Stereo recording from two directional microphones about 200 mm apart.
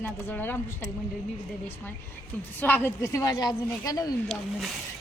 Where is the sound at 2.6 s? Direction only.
10° left (ahead or behind).